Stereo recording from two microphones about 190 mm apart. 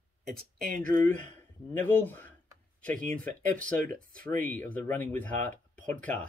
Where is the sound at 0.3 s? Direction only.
55° right (ahead or behind).